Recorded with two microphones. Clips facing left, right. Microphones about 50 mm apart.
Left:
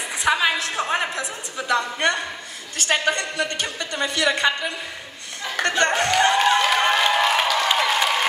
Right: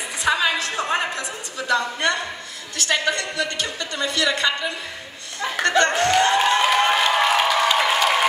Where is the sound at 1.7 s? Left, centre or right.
Left.